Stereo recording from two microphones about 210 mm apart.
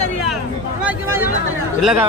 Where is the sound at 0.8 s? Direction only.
10° right (ahead or behind).